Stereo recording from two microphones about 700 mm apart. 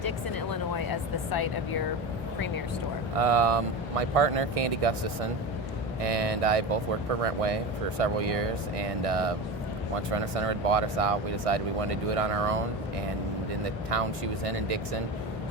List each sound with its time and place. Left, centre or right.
0.5 s a sound: left
3.2 s speech: right
13.9 s speech: right